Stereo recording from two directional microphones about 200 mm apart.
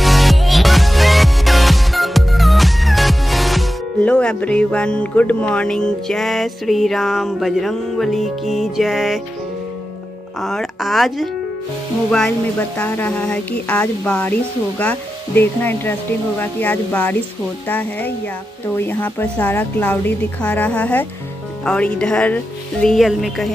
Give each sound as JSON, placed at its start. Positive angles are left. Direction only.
{"t": 0.0, "sound": "music", "side_deg": 0}
{"t": 10.4, "sound": "speech", "side_deg": 0}
{"t": 12.7, "sound": "a woman's voice", "side_deg": 10}